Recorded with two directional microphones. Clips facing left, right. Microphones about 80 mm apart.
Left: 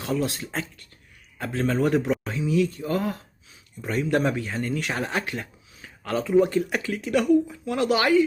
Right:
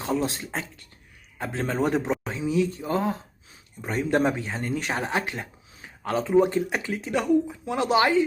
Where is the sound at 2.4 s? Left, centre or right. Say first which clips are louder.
Left 1 dB; centre.